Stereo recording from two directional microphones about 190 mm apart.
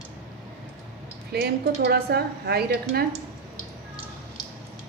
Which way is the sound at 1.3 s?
60° right (ahead or behind).